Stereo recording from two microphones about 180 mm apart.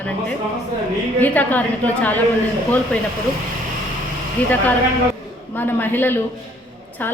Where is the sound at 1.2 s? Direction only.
10° left (ahead or behind).